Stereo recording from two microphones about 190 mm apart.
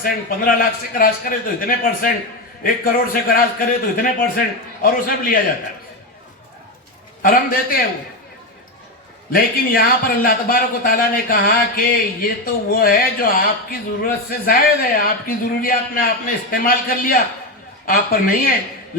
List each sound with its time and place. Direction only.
0.0 s speech: 50° left (ahead or behind)
7.2 s speech: 45° left (ahead or behind)
9.3 s speech: 50° left (ahead or behind)